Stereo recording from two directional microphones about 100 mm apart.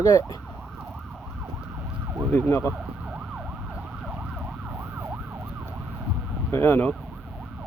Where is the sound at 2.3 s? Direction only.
20° left (ahead or behind).